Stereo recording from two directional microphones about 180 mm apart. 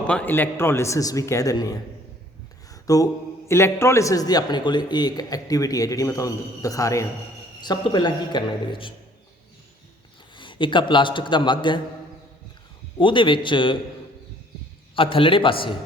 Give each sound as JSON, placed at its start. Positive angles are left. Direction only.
{"t": 0.1, "sound": "a man's voice", "side_deg": 10}
{"t": 2.8, "sound": "mantra", "side_deg": 20}
{"t": 3.5, "sound": "a man's voice", "side_deg": 15}
{"t": 10.3, "sound": "a man's voice", "side_deg": 25}
{"t": 13.0, "sound": "a man's voice", "side_deg": 25}
{"t": 14.9, "sound": "a man's voice", "side_deg": 30}